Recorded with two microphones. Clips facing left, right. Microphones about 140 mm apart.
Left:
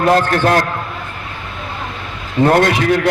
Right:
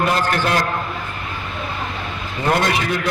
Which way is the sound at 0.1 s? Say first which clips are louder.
Left 6 dB; 55° left (ahead or behind).